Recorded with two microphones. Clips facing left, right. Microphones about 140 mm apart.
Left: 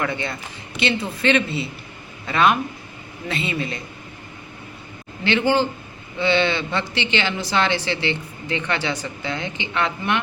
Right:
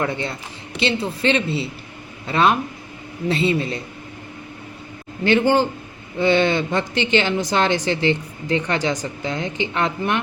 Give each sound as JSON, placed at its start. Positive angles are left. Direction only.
{"t": 0.0, "sound": "a woman's voice", "side_deg": -35}
{"t": 5.2, "sound": "a man's voice", "side_deg": -45}